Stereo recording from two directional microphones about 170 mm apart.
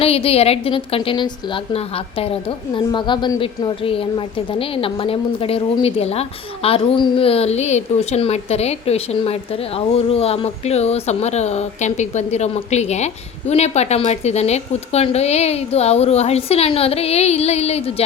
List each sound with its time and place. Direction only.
0.0 s a woman's voice: 35° left (ahead or behind)